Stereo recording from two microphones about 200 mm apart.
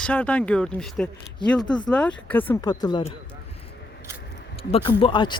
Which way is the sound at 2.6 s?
20° left (ahead or behind).